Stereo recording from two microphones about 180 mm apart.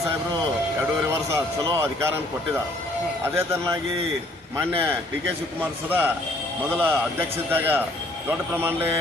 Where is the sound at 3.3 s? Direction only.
15° right (ahead or behind).